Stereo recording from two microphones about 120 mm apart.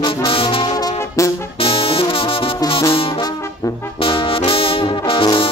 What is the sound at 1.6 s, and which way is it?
Music, 50° left (ahead or behind).